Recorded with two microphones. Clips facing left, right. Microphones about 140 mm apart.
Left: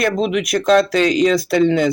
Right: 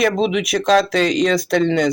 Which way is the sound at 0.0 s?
Centre (ahead or behind).